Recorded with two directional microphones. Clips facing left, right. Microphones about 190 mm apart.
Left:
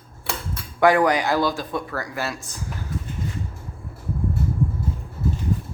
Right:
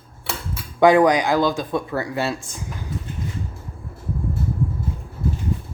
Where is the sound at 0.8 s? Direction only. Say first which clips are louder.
Right 3 dB; 20° right (ahead or behind).